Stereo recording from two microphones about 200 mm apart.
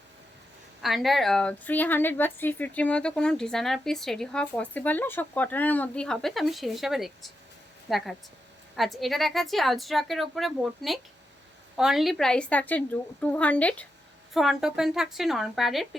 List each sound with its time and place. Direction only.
0.8 s a woman's voice: centre (ahead or behind)